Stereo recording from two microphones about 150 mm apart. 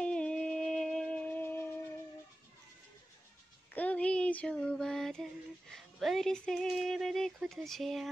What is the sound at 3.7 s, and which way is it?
Child singing, 10° left (ahead or behind).